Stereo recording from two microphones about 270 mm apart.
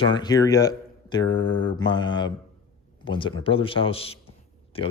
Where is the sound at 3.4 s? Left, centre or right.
Centre.